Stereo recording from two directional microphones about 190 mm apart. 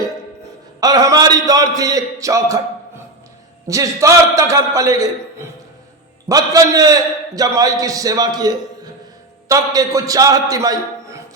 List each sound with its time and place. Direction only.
0.8 s a man's voice: 20° right (ahead or behind)
3.7 s a man's voice: 15° right (ahead or behind)
6.2 s a man's voice: 20° right (ahead or behind)